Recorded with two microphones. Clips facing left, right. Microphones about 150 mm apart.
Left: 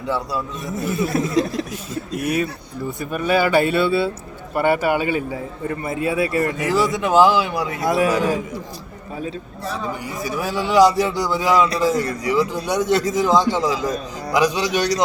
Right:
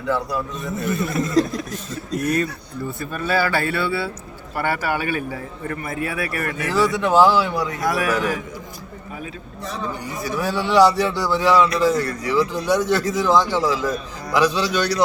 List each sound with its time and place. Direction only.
0.6 s a man's voice: 10° left (ahead or behind); by 8.4 s 30° left (ahead or behind)
10.2 s a man's voice: 10° left (ahead or behind)